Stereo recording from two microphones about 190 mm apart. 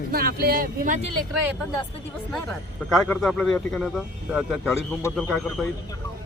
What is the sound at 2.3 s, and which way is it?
Speech, 5° left (ahead or behind).